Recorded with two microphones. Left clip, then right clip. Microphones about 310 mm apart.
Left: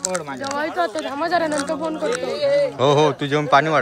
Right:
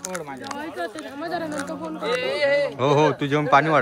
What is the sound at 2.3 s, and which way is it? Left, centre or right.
Speech, right.